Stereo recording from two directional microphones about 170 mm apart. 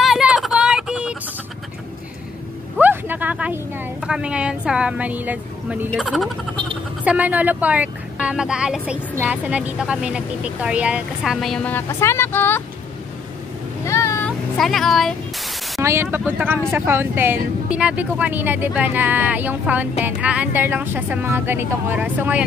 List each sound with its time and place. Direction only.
0.0 s a sound: 5° right (ahead or behind)
2.8 s a woman's voice: 10° right (ahead or behind)
5.9 s speech: centre (ahead or behind)
13.8 s vehicle: 15° left (ahead or behind)
14.2 s vehicle: centre (ahead or behind)
15.8 s speech: 15° right (ahead or behind)